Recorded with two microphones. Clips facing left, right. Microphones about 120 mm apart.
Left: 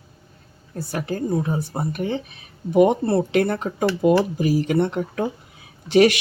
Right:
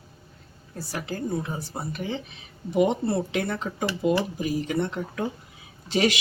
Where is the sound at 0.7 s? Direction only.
55° left (ahead or behind).